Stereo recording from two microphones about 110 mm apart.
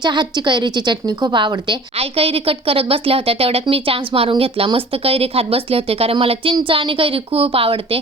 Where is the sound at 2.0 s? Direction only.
60° right (ahead or behind).